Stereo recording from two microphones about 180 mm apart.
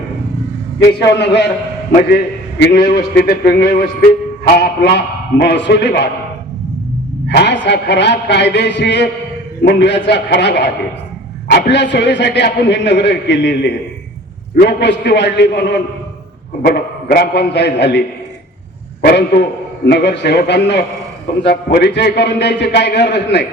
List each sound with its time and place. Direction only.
0.9 s a man's voice: 70° left (ahead or behind)
1.9 s a man's voice: 50° left (ahead or behind)
2.6 s a man's voice: 65° left (ahead or behind)
7.3 s a man's voice: 70° left (ahead or behind)
16.6 s a man's voice: 60° left (ahead or behind)
19.0 s a man's voice: 65° left (ahead or behind)